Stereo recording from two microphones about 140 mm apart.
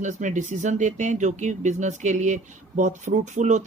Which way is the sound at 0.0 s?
60° right (ahead or behind).